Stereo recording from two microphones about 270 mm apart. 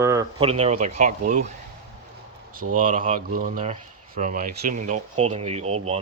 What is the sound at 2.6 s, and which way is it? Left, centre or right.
Speech, right.